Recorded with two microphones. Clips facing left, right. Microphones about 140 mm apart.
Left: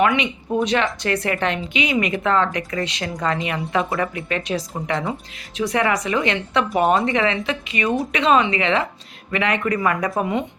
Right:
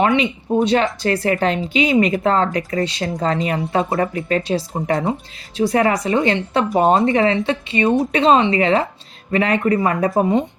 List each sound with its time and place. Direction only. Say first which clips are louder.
0.0 s speech: right 2 dB; 30° right (ahead or behind)